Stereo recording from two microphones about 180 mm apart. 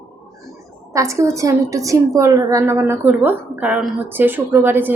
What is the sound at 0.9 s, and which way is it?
A woman's voice, 15° right (ahead or behind).